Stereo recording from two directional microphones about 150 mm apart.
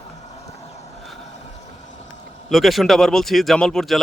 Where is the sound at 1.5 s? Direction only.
50° left (ahead or behind).